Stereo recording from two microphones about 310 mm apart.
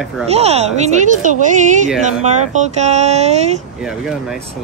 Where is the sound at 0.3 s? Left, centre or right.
Centre.